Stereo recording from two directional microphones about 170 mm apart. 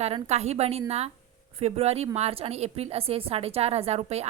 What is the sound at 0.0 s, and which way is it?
A woman's voice, 40° right (ahead or behind).